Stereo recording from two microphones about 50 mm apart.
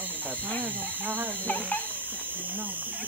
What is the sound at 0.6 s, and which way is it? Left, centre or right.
Speech, right.